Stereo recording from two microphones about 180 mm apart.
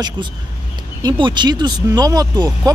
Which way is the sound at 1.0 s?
25° right (ahead or behind).